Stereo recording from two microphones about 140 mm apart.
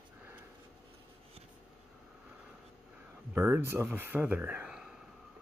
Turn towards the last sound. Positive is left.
turn(degrees=-5)  # may be behind; listen again after turning